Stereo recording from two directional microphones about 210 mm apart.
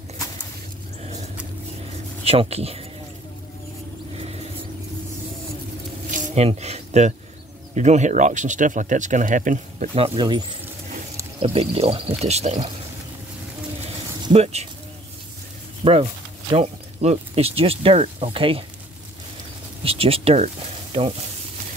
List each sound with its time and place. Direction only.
1.0 s vehicle: 30° right (ahead or behind)
2.2 s speech: 30° right (ahead or behind)
6.0 s a sound: 35° right (ahead or behind)
7.7 s speech: 35° right (ahead or behind)
11.4 s speech: 25° right (ahead or behind)
14.2 s speech: 30° right (ahead or behind)
15.8 s speech: 25° right (ahead or behind)
19.8 s speech: 25° right (ahead or behind)